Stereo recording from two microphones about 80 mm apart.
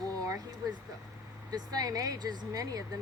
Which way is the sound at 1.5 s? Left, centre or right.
Right.